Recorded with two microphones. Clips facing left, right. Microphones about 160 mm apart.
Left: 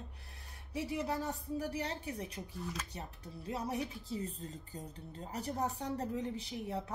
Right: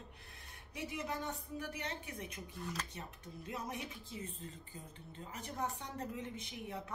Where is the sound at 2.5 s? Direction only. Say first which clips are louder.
Left 1 dB; centre (ahead or behind).